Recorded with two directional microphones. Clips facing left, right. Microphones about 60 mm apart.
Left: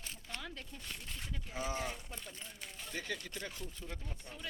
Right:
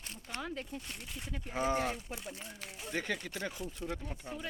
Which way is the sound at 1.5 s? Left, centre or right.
Right.